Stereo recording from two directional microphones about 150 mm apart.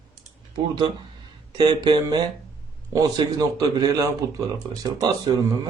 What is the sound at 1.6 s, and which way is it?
A man's voice, 30° right (ahead or behind).